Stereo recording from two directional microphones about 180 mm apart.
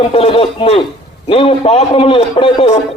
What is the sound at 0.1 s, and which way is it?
Speech, 35° left (ahead or behind).